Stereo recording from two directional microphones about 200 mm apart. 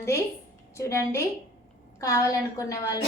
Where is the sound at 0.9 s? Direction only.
15° left (ahead or behind).